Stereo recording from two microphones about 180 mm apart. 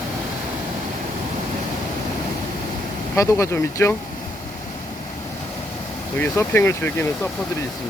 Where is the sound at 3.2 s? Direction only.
15° left (ahead or behind).